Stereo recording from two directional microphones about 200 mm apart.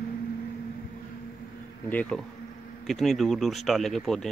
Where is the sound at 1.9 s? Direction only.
5° left (ahead or behind).